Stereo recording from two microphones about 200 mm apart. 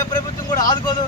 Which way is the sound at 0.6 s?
20° left (ahead or behind).